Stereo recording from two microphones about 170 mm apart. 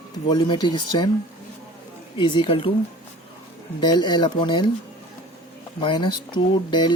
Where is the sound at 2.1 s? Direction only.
30° left (ahead or behind).